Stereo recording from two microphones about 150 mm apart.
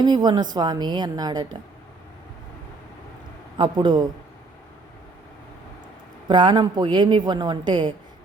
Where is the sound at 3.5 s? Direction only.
30° right (ahead or behind).